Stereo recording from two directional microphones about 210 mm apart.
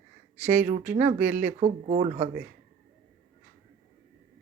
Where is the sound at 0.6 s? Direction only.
40° right (ahead or behind).